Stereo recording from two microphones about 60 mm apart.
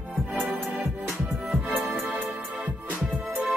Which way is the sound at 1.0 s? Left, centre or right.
Right.